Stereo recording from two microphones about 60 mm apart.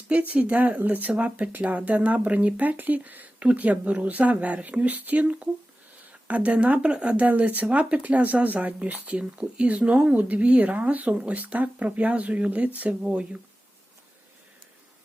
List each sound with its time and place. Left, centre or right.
0.1 s speech: right